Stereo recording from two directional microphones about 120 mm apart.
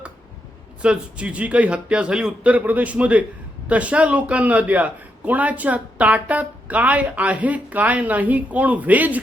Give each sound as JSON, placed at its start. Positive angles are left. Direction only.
{"t": 0.8, "sound": "speech", "side_deg": -10}